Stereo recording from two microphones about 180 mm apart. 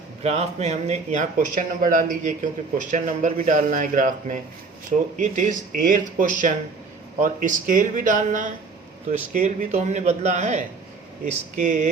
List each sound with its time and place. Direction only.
0.2 s a man's voice: 35° right (ahead or behind)